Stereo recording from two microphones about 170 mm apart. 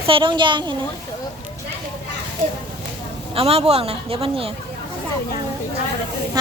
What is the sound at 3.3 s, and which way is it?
Speech, 35° right (ahead or behind).